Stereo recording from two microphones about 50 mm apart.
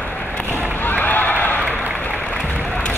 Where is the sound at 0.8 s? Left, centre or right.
Left.